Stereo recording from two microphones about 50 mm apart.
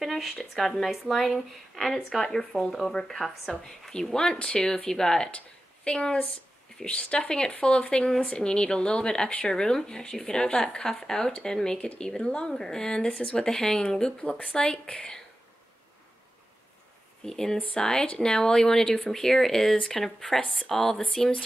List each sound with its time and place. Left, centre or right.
0.0 s a sound: centre
0.4 s speech: centre; by 15.1 s left
17.2 s speech: centre